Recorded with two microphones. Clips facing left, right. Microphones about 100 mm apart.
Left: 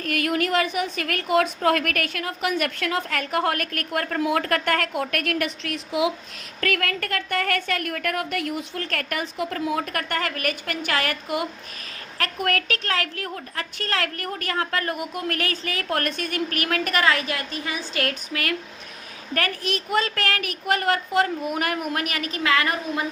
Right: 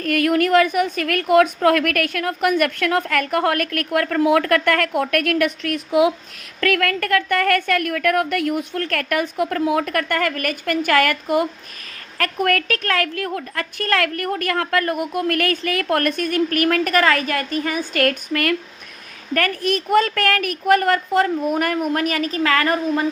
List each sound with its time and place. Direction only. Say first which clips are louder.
0.0 s a woman's voice: right 6 dB; 50° right (ahead or behind)